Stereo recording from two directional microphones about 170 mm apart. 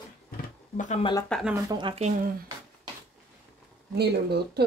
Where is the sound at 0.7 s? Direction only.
45° left (ahead or behind).